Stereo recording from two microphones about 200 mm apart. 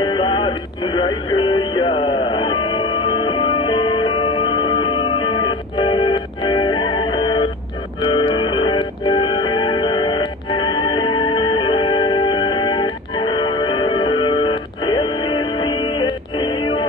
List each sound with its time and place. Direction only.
0.0 s music: 25° left (ahead or behind)